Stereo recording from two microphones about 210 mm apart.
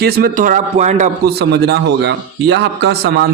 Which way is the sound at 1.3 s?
50° right (ahead or behind).